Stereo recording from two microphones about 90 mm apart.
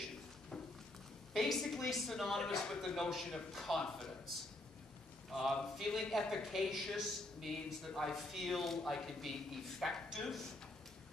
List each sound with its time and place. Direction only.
1.3 s speech: centre (ahead or behind)
5.3 s speech: centre (ahead or behind)